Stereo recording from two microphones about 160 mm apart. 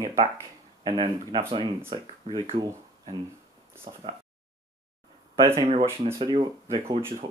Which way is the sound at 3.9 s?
30° right (ahead or behind).